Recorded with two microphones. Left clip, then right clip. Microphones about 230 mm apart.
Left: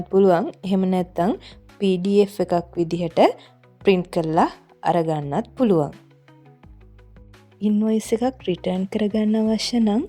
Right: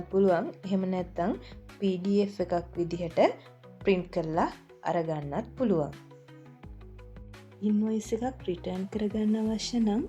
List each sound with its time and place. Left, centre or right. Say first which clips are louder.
0.1 s a woman's voice: left 8 dB; left
7.6 s speech: left 8 dB; left